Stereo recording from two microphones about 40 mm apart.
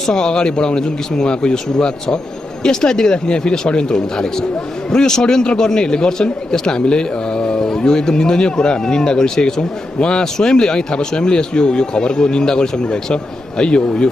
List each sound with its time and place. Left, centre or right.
0.0 s speech: centre